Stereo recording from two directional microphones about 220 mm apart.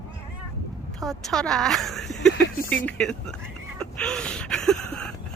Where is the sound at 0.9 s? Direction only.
Centre (ahead or behind).